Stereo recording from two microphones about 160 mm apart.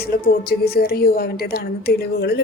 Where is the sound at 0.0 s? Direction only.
75° left (ahead or behind).